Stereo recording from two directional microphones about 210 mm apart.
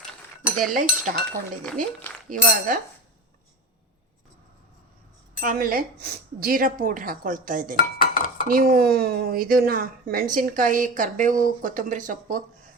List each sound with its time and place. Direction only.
0.7 s speech: 40° right (ahead or behind)
1.6 s speech: 5° left (ahead or behind)
2.3 s speech: 40° right (ahead or behind)
5.4 s speech: 45° right (ahead or behind)
7.9 s cutlery: 40° left (ahead or behind)
8.4 s speech: 45° right (ahead or behind)